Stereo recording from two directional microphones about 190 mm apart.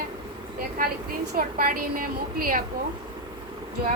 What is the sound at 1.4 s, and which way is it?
A woman's voice, 50° right (ahead or behind).